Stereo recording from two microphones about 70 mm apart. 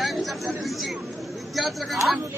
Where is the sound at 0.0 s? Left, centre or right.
Centre.